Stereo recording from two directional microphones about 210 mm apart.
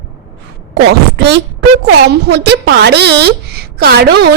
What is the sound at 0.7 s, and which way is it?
A woman's voice, 55° right (ahead or behind).